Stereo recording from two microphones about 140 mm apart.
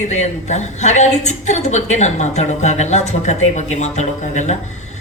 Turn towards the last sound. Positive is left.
turn(degrees=55)  # may be behind; listen again after turning